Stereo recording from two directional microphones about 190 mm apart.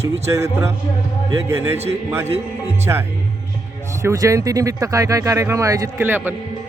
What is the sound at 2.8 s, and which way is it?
Speech, 15° right (ahead or behind).